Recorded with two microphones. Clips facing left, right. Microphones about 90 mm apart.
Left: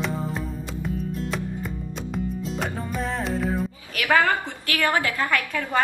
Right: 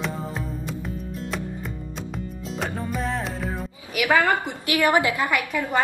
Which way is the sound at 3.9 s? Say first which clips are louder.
Right 1 dB; 15° right (ahead or behind).